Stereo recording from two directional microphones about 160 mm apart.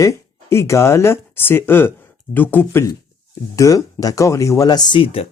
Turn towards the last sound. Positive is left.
turn(degrees=35)  # may be behind; listen again after turning